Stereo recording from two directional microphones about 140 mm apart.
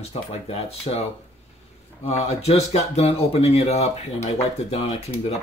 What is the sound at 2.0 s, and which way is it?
Speech, 50° left (ahead or behind).